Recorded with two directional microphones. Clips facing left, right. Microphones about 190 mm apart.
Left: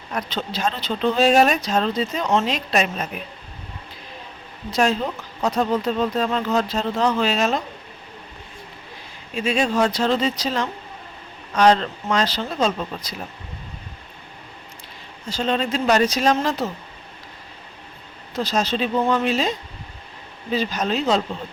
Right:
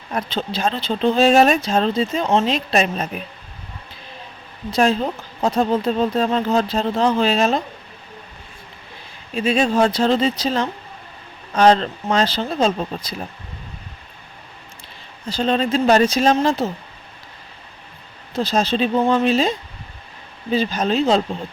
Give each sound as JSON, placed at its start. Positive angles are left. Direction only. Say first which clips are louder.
{"t": 0.1, "sound": "speech", "louder": "right 3 dB", "side_deg": -30}
{"t": 4.7, "sound": "speech", "louder": "right 3 dB", "side_deg": -30}
{"t": 9.3, "sound": "speech", "louder": "right 3 dB", "side_deg": -35}
{"t": 15.3, "sound": "speech", "louder": "right 3 dB", "side_deg": -35}
{"t": 18.3, "sound": "speech", "louder": "right 3 dB", "side_deg": -30}